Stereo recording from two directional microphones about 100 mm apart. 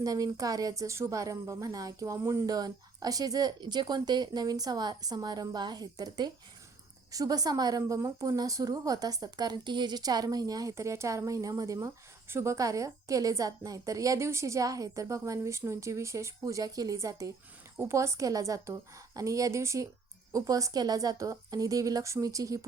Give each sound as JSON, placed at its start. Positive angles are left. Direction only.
{"t": 0.0, "sound": "a woman's voice", "side_deg": -35}
{"t": 2.5, "sound": "a woman's voice", "side_deg": -40}